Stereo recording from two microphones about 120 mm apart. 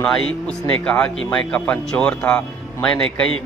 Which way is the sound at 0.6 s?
10° left (ahead or behind).